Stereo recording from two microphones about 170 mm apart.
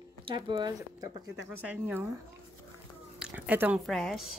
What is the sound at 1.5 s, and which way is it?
Speech, 10° right (ahead or behind).